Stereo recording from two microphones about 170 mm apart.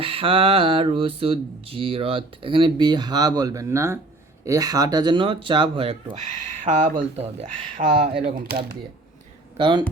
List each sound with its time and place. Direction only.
0.0 s speech: 30° right (ahead or behind)
8.2 s speech: 65° right (ahead or behind)
9.6 s speech: 30° right (ahead or behind)